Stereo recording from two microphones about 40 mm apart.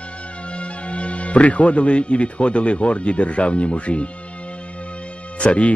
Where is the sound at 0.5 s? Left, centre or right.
Left.